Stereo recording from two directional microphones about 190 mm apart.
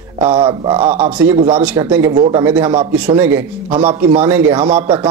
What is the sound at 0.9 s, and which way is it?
Speech, 5° right (ahead or behind).